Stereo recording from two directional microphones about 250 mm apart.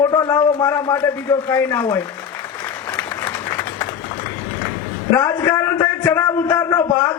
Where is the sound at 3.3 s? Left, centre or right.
Centre.